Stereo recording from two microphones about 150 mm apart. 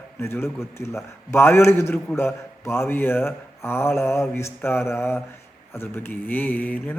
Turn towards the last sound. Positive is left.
turn(degrees=10)  # may be behind; listen again after turning